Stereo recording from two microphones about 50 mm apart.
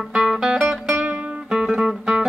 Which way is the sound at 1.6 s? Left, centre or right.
Centre.